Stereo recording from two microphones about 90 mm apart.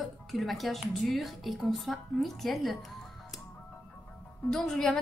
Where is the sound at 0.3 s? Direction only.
Centre (ahead or behind).